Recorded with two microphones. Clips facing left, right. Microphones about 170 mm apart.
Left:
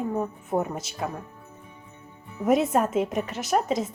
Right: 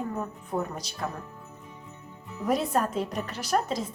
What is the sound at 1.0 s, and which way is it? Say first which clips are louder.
Speech: left 2 dB; 15° left (ahead or behind).